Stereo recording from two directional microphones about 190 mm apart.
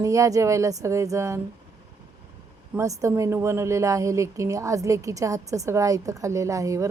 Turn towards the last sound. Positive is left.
turn(degrees=-15)  # may be behind; listen again after turning